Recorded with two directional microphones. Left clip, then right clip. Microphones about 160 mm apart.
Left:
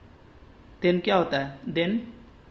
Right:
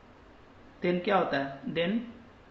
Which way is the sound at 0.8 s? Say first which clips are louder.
Left 4 dB; 55° left (ahead or behind).